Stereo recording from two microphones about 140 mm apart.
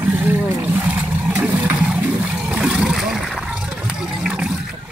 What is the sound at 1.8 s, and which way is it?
Water, 5° right (ahead or behind).